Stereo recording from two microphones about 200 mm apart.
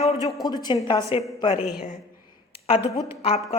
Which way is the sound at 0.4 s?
20° left (ahead or behind).